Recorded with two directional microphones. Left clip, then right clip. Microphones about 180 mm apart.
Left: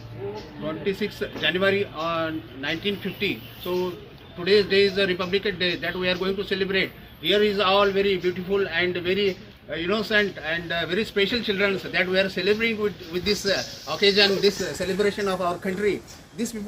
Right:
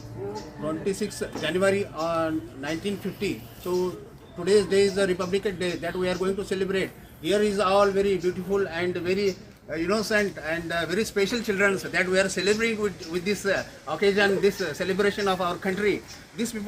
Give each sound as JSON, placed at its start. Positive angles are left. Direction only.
{"t": 1.4, "sound": "a man's voice", "side_deg": -10}
{"t": 4.4, "sound": "a man's voice", "side_deg": -10}